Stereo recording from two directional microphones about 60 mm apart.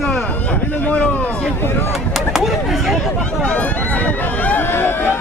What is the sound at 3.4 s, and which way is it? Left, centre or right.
Run, centre.